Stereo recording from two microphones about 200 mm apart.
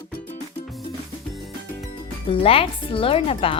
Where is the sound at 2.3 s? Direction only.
30° left (ahead or behind).